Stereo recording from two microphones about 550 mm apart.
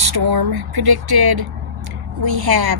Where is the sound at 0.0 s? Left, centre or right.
Right.